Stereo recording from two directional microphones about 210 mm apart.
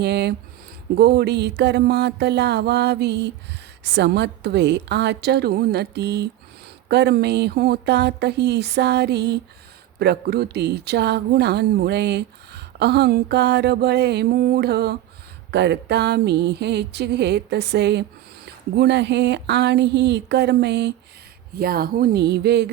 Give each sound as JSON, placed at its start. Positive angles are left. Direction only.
{"t": 0.0, "sound": "speech", "side_deg": -50}